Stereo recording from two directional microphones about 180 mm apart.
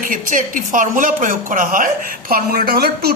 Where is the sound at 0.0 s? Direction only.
50° right (ahead or behind).